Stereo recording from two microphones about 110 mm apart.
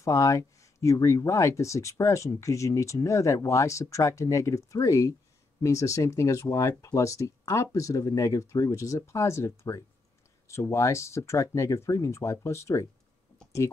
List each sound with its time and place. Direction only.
0.0 s speech: 30° left (ahead or behind)